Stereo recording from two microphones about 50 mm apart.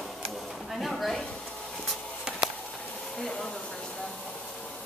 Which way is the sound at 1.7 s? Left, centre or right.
Centre.